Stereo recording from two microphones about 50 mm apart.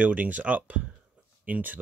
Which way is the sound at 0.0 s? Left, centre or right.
Right.